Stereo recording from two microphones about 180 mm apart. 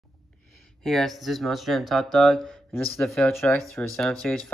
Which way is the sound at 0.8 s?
Centre (ahead or behind).